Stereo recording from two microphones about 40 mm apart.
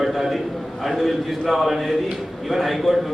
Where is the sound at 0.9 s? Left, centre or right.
Centre.